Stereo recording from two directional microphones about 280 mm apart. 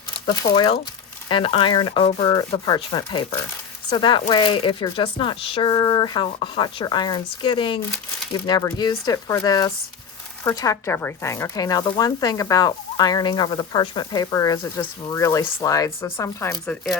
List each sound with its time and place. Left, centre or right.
0.3 s speech: centre